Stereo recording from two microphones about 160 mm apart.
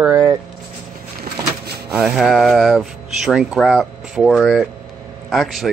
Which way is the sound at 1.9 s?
5° right (ahead or behind).